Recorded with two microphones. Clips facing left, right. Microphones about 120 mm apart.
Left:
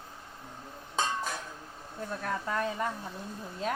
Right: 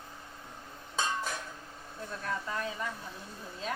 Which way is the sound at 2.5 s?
45° left (ahead or behind).